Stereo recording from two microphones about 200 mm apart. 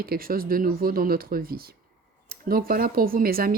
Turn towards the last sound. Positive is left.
turn(degrees=-45)  # may be behind; listen again after turning